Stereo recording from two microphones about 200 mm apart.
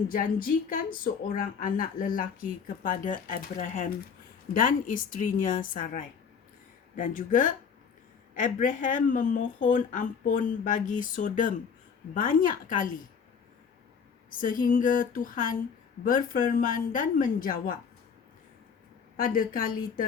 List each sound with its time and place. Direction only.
0.1 s speech: 45° left (ahead or behind)
14.3 s speech: 40° left (ahead or behind)
19.1 s speech: 45° left (ahead or behind)